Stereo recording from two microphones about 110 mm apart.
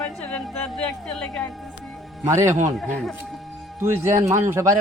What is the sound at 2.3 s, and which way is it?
Speech, 25° right (ahead or behind).